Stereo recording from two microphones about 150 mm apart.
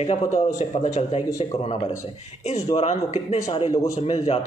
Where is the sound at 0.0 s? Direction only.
45° left (ahead or behind).